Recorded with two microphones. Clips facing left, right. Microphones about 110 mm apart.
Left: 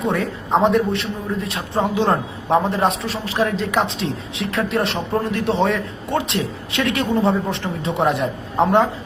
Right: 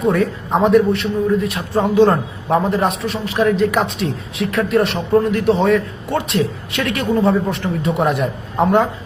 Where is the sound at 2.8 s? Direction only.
30° left (ahead or behind).